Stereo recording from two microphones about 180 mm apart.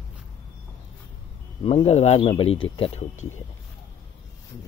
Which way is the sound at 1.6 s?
35° left (ahead or behind).